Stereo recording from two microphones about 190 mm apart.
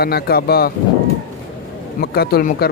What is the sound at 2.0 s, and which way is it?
Speech, 55° left (ahead or behind).